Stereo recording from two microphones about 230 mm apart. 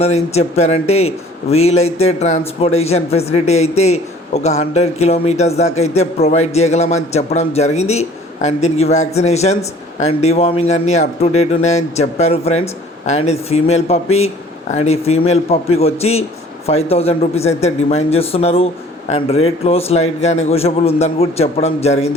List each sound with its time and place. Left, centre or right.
0.0 s a man's voice: left